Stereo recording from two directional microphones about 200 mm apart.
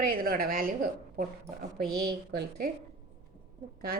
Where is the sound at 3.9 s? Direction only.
50° right (ahead or behind).